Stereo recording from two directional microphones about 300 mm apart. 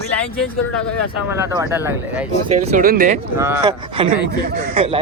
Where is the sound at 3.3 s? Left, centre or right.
Centre.